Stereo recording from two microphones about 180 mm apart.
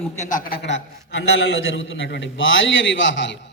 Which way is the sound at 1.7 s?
90° left.